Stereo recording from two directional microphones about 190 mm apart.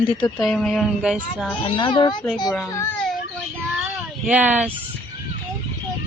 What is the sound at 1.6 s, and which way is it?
Speech, 30° left (ahead or behind).